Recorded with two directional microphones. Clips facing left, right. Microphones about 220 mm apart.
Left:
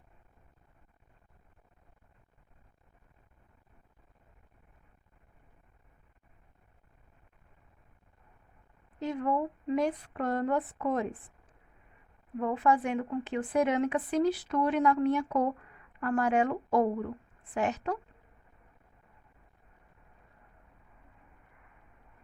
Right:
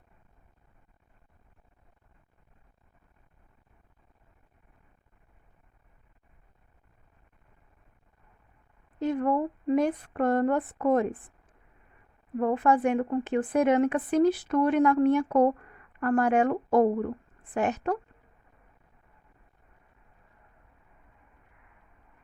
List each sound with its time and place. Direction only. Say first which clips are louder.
9.0 s a woman's voice: right 4 dB; 50° right (ahead or behind)
12.4 s a woman's voice: right 4 dB; 50° right (ahead or behind)